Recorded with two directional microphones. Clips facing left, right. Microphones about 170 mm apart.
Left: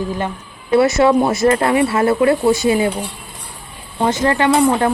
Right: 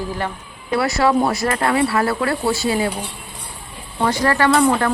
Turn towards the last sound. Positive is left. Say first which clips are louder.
# left 2 dB
turn(degrees=15)  # may be behind; listen again after turning